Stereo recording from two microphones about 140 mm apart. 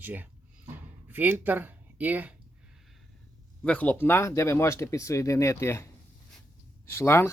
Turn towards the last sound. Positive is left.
turn(degrees=20)  # may be behind; listen again after turning